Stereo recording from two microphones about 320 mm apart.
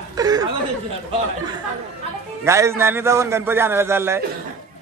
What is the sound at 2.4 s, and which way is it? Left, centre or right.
A man's voice, centre.